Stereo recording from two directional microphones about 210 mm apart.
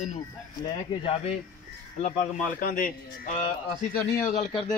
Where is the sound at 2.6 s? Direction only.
40° left (ahead or behind).